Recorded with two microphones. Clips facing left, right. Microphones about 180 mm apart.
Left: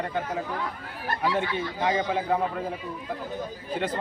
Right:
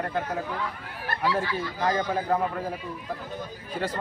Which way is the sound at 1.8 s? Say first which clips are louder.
Even; 5° left (ahead or behind).